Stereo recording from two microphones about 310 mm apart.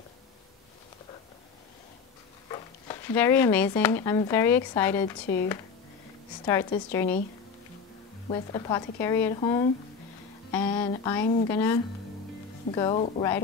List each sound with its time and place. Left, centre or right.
2.5 s speech: centre
5.2 s speech: left
6.4 s a woman's voice: centre
8.3 s a woman's voice: centre